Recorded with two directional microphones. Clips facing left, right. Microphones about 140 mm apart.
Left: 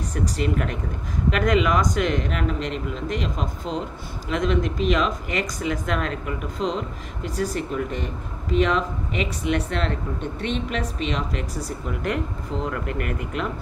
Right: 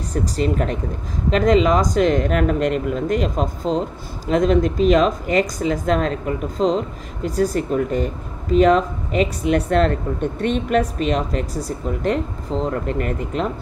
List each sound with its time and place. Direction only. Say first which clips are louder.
0.1 s speech: right 4 dB; 35° right (ahead or behind)